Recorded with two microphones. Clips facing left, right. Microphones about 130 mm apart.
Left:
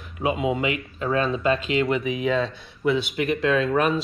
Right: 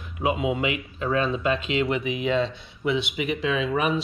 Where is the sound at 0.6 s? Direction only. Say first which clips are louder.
Left 1 dB; 15° right (ahead or behind).